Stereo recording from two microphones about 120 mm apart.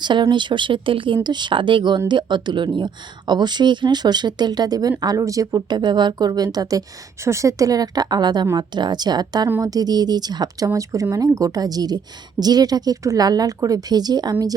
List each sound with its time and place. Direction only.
0.0 s speech: 40° right (ahead or behind)